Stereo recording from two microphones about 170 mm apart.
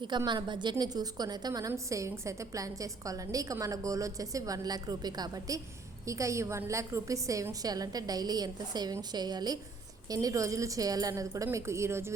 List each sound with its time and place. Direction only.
0.3 s a woman's voice: 25° right (ahead or behind)